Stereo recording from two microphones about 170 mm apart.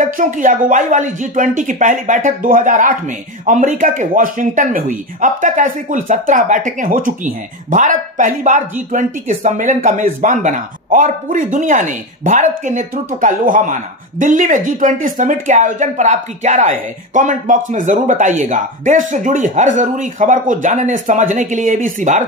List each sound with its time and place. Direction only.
0.0 s speech: 50° right (ahead or behind)